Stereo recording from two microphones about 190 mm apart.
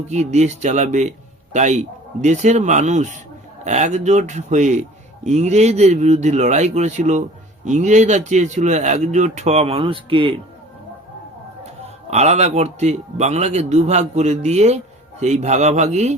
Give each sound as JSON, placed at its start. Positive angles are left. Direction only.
{"t": 0.1, "sound": "a man's voice", "side_deg": -35}
{"t": 12.1, "sound": "a man's voice", "side_deg": -35}